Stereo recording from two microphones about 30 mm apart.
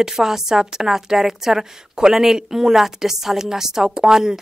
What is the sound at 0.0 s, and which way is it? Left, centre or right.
Speech, centre.